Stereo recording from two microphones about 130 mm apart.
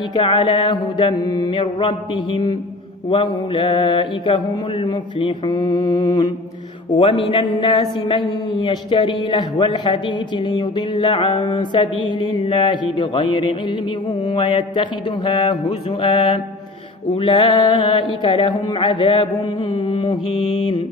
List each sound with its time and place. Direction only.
0.1 s music: 40° left (ahead or behind)
3.1 s mantra: 40° left (ahead or behind)
4.8 s music: 35° left (ahead or behind)
7.0 s mantra: 45° left (ahead or behind)
8.5 s music: 40° left (ahead or behind)
16.0 s mantra: 45° left (ahead or behind)
17.2 s music: 45° left (ahead or behind)